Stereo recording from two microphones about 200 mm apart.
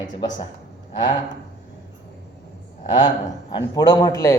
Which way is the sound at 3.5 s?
20° left (ahead or behind).